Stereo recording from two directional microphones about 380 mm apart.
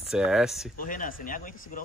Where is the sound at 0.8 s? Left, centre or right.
Left.